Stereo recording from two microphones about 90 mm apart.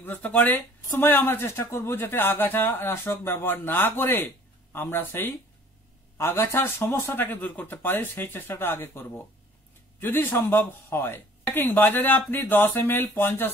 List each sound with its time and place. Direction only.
0.0 s speech: 20° left (ahead or behind)